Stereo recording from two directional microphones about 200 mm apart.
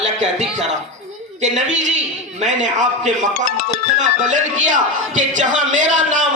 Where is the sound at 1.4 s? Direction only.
35° right (ahead or behind).